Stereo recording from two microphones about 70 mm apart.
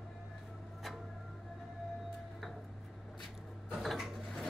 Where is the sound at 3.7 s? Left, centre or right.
Centre.